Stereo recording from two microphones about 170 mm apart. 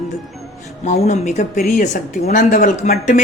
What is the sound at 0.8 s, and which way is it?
Speech, 45° left (ahead or behind).